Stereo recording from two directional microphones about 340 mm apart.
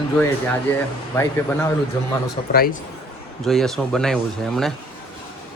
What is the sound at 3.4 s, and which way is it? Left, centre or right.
Speech, centre.